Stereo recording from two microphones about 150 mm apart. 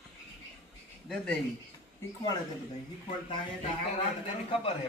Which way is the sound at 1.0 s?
5° left (ahead or behind).